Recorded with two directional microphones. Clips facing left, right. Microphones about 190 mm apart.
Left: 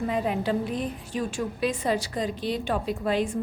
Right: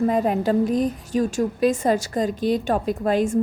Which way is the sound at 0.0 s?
45° right (ahead or behind).